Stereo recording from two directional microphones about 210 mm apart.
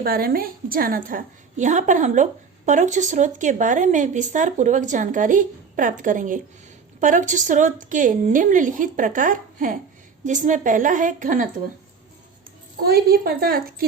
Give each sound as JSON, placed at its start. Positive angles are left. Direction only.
{"t": 0.0, "sound": "speech", "side_deg": -45}
{"t": 12.8, "sound": "a woman's voice", "side_deg": -45}